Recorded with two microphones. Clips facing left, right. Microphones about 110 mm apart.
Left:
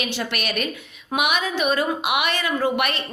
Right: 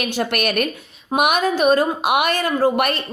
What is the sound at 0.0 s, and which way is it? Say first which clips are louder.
A woman's voice: right 6 dB; 50° right (ahead or behind).